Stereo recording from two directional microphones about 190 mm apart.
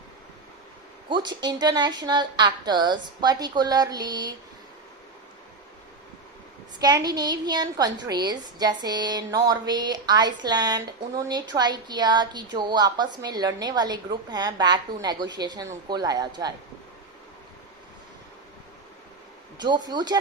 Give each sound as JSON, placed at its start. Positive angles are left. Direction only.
{"t": 1.1, "sound": "a woman's voice", "side_deg": -20}
{"t": 6.7, "sound": "a woman's voice", "side_deg": -20}
{"t": 19.5, "sound": "a woman's voice", "side_deg": -20}